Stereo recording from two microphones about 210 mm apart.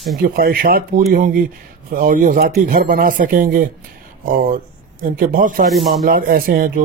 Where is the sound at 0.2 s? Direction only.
45° right (ahead or behind).